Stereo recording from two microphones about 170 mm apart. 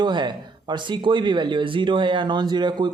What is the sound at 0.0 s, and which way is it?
Speech, 25° right (ahead or behind).